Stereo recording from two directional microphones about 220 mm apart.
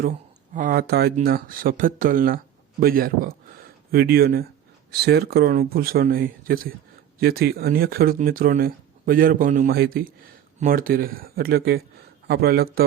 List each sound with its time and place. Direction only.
0.5 s speech: 40° right (ahead or behind)